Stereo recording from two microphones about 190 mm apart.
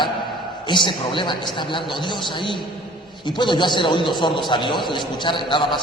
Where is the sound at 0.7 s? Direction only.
25° left (ahead or behind).